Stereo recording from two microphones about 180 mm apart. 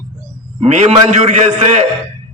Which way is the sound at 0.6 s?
35° right (ahead or behind).